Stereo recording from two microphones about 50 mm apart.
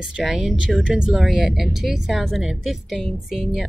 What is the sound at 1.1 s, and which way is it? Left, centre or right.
Speech, centre.